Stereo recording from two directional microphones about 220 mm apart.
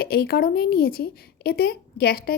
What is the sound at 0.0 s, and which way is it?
A woman's voice, 45° left (ahead or behind).